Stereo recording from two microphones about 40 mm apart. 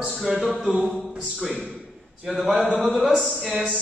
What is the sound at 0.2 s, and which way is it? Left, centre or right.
Speech, centre.